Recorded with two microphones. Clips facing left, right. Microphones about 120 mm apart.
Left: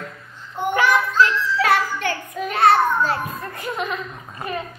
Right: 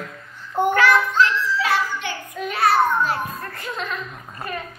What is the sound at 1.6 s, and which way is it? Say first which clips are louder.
Music: left 6 dB; 50° left (ahead or behind).